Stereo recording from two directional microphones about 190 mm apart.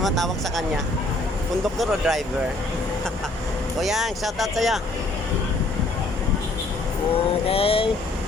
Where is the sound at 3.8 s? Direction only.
Centre (ahead or behind).